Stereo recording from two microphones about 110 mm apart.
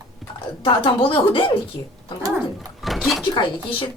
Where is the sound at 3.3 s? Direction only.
50° left (ahead or behind).